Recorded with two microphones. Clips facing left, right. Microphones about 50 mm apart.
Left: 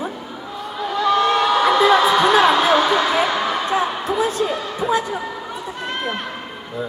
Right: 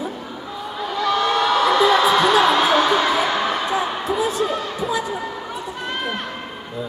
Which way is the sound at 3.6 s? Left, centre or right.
Left.